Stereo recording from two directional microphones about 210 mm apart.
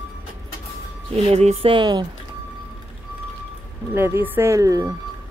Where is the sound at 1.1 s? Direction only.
30° right (ahead or behind).